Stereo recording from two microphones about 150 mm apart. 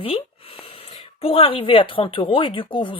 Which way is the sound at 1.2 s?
40° left (ahead or behind).